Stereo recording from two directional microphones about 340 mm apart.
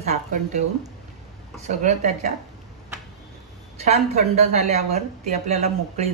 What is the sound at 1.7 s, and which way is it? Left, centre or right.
Speech, right.